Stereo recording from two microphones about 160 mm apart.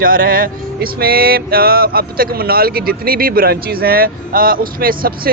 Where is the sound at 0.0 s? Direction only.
60° right (ahead or behind).